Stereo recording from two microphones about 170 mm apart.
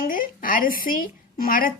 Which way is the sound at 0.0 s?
55° left (ahead or behind).